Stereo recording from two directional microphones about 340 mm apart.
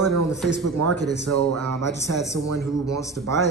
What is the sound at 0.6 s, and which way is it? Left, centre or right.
Mantra, right.